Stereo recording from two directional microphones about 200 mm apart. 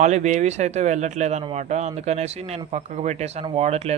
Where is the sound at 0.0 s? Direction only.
35° right (ahead or behind).